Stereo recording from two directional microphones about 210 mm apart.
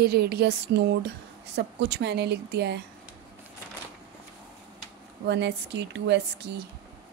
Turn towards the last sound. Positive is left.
turn(degrees=-55)  # may be behind; listen again after turning